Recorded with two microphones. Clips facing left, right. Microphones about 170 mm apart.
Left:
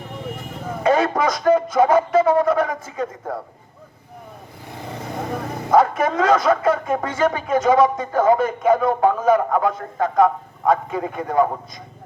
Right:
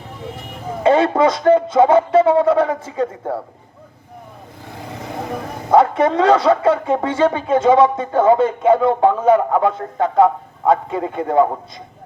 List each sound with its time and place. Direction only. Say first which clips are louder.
0.8 s speech: right 4 dB; 25° right (ahead or behind)
5.7 s speech: right 3 dB; 30° right (ahead or behind)